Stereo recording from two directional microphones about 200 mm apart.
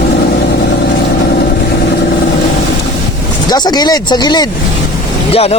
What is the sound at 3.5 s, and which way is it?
Speech, 20° left (ahead or behind).